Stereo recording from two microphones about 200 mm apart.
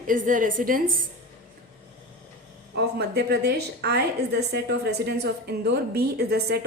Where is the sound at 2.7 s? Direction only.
55° right (ahead or behind).